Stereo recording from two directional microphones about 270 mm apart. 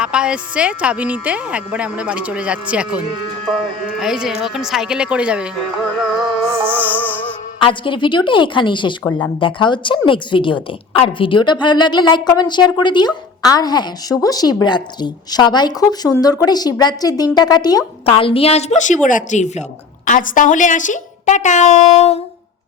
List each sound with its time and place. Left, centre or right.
0.0 s speech: centre
6.7 s a woman's voice: centre
7.6 s a woman's voice: centre
9.0 s a woman's voice: centre; by 22.2 s left